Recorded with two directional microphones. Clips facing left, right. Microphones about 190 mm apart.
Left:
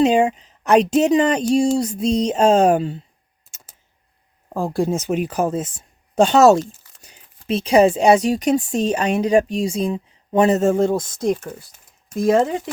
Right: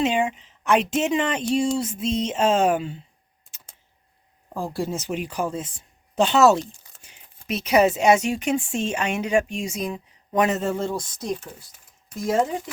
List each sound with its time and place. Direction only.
0.0 s speech: 40° left (ahead or behind)
4.4 s speech: 50° left (ahead or behind); by 10.6 s 30° left (ahead or behind)
10.6 s speech: 45° left (ahead or behind)
12.0 s speech: 60° left (ahead or behind)